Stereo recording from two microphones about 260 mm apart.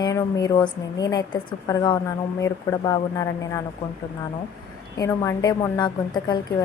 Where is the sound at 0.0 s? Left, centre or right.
Centre.